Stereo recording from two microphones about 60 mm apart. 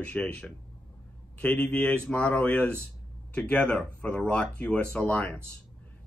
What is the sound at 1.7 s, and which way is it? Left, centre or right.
Speech, left.